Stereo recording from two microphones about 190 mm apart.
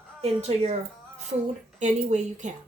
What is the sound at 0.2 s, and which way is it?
Speech, 35° right (ahead or behind).